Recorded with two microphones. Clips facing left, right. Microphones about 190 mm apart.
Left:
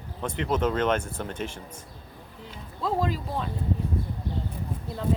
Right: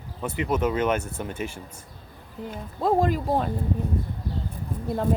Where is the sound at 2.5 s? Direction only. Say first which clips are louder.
Right 6 dB; 50° right (ahead or behind).